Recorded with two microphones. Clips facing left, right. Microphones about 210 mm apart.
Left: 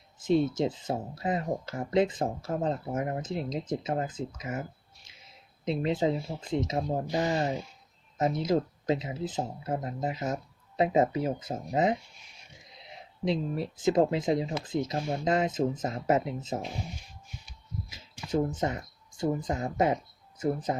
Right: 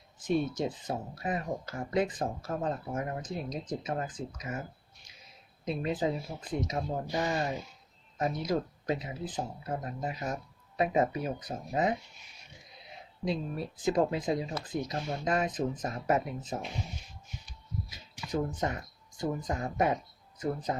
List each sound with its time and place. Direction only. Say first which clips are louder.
0.2 s speech: left 4 dB; 25° left (ahead or behind)
5.6 s speech: left 4 dB; 25° left (ahead or behind)
13.2 s speech: left 4 dB; 25° left (ahead or behind)
17.8 s speech: left 1 dB; 25° left (ahead or behind)